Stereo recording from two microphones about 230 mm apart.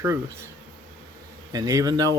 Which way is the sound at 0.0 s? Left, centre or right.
Centre.